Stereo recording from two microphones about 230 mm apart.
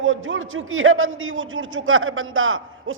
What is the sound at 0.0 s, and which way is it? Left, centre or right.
A man's voice, right.